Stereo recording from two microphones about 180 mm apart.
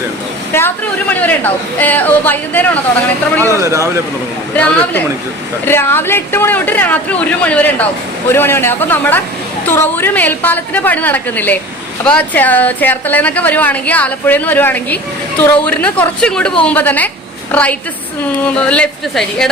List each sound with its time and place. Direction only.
0.5 s a woman's voice: 15° left (ahead or behind)
3.6 s speech: 15° right (ahead or behind)
4.5 s a woman's voice: 10° left (ahead or behind)